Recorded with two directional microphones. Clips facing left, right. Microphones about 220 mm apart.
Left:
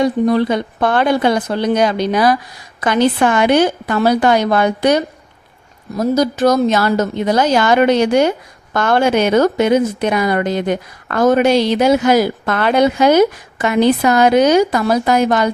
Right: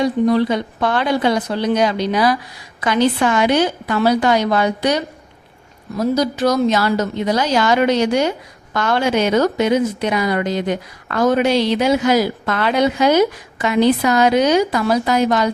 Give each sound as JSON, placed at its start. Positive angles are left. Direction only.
{"t": 0.0, "sound": "a woman's voice", "side_deg": 50}